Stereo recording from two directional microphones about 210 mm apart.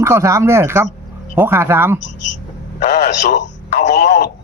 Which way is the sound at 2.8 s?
45° left (ahead or behind).